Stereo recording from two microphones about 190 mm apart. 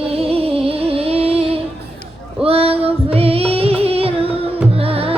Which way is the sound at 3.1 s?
30° right (ahead or behind).